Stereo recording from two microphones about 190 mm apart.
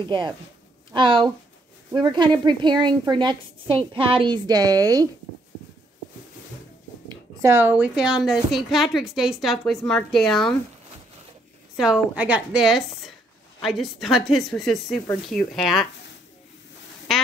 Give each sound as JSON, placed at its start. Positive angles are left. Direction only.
{"t": 0.9, "sound": "a woman's voice", "side_deg": -25}
{"t": 7.1, "sound": "a woman's voice", "side_deg": -15}
{"t": 11.7, "sound": "a woman's voice", "side_deg": -5}
{"t": 17.1, "sound": "quack", "side_deg": 0}